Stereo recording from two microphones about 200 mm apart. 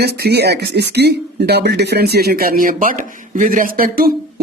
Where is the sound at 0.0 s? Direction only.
55° right (ahead or behind).